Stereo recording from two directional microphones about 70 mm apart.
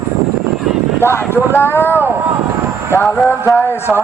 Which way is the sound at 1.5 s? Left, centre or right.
Left.